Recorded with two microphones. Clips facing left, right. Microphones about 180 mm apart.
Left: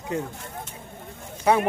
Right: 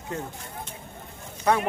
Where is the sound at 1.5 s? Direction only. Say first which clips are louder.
Left 3 dB; 10° left (ahead or behind).